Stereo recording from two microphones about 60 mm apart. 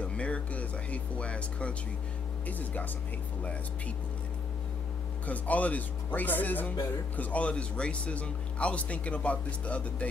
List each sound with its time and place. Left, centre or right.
0.0 s a sound: centre
2.4 s speech: left
5.2 s speech: left